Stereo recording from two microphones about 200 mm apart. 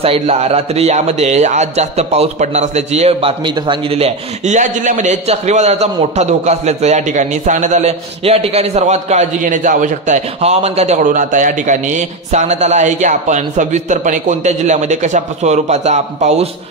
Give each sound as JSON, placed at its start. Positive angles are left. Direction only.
{"t": 0.0, "sound": "speech", "side_deg": -30}